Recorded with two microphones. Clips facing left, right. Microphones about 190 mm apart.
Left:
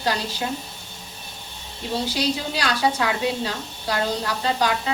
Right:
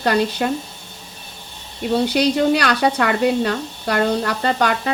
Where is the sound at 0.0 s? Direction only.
60° right (ahead or behind).